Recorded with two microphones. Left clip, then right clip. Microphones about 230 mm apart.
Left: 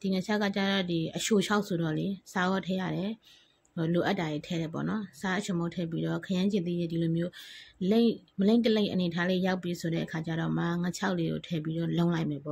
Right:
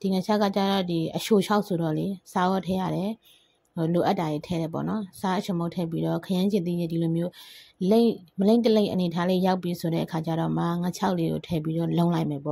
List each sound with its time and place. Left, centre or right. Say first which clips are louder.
0.0 s speech: right 6 dB; centre